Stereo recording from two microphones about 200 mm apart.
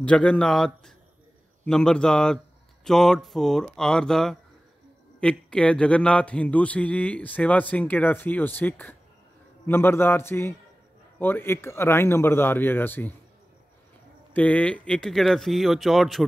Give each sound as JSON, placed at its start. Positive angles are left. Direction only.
{"t": 0.0, "sound": "speech", "side_deg": 5}
{"t": 14.3, "sound": "speech", "side_deg": 5}